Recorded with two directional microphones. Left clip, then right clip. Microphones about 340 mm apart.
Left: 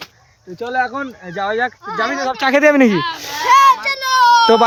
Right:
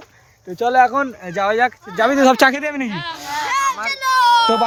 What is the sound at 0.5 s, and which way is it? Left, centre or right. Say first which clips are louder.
Speech: right 5 dB; centre.